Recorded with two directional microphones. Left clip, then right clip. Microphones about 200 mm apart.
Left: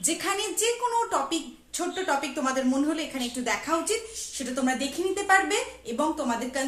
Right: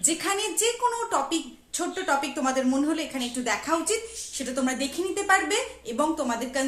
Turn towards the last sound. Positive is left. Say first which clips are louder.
# right 1 dB
turn(degrees=-25)  # may be behind; listen again after turning